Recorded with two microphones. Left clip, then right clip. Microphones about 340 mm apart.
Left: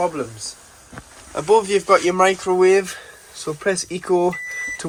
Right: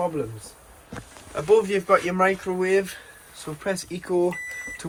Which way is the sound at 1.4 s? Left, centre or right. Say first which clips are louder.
Left 4 dB; centre.